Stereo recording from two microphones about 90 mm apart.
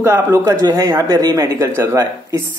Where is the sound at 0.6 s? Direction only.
45° right (ahead or behind).